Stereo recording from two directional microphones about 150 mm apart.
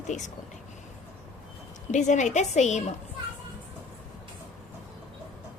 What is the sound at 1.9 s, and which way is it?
Speech, 55° left (ahead or behind).